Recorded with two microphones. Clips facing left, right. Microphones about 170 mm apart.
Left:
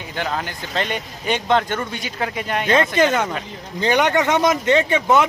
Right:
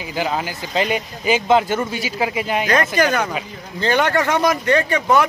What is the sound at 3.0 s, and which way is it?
Speech, 25° left (ahead or behind).